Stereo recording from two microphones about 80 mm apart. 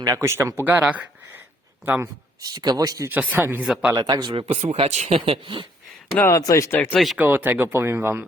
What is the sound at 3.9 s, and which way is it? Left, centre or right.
Speech, right.